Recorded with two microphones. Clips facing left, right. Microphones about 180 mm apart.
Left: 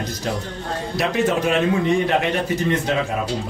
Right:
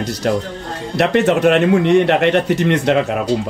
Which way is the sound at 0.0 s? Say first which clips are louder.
Right 7 dB; 70° right (ahead or behind).